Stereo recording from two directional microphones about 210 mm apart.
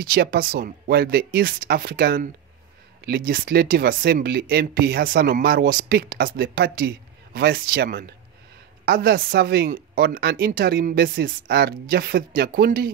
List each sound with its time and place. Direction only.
0.0 s a man's voice: 45° right (ahead or behind)